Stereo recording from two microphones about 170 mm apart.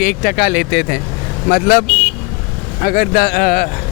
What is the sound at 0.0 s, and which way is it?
Speech, 60° left (ahead or behind).